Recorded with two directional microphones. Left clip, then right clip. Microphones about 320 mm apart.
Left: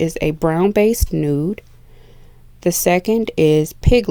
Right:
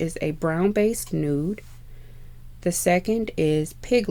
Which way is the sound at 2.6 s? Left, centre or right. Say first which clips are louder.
Left 6 dB; left.